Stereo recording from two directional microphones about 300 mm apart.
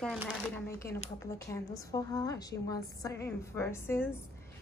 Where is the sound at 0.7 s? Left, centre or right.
Left.